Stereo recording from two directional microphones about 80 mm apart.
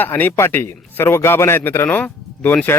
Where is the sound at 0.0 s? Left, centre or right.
Left.